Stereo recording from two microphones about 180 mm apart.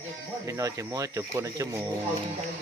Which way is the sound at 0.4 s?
20° right (ahead or behind).